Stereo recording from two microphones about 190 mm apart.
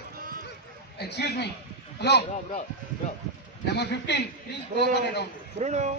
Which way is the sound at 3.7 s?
65° left (ahead or behind).